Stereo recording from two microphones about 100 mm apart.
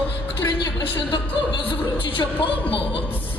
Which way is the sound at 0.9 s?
50° left (ahead or behind).